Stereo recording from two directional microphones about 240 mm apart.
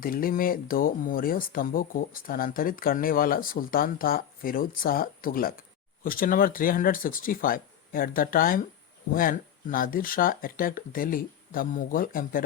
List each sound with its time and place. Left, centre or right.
0.0 s speech: left